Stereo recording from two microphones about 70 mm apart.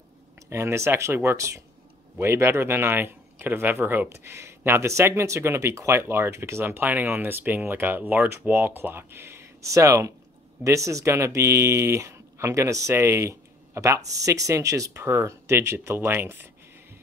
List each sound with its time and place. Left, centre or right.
0.5 s speech: right
2.1 s speech: right
4.1 s speech: right
6.6 s speech: right